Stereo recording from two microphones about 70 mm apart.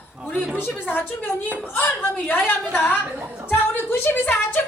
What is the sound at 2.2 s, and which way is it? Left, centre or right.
A woman's voice, left.